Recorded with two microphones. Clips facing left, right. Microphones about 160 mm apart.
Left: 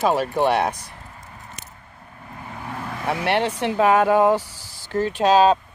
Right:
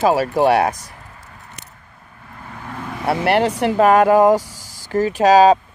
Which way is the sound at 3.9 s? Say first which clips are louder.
Right 4 dB; 50° right (ahead or behind).